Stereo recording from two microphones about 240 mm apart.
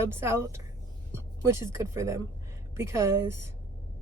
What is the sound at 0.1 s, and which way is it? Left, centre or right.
Speech, centre.